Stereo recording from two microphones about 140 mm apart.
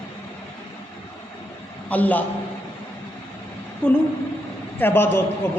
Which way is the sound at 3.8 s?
10° left (ahead or behind).